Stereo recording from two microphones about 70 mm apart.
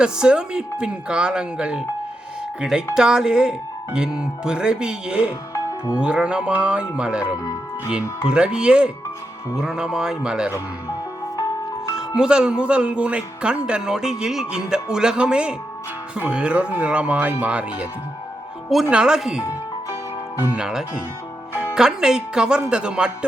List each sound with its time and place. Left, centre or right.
0.0 s speech: centre
11.9 s speech: centre
18.9 s speech: centre
20.6 s speech: centre